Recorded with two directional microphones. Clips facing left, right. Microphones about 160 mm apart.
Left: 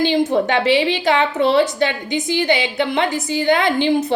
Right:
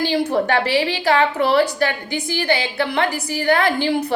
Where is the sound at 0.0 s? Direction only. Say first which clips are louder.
Left 3 dB; 20° left (ahead or behind).